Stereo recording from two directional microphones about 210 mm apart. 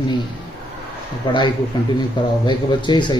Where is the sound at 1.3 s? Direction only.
20° left (ahead or behind).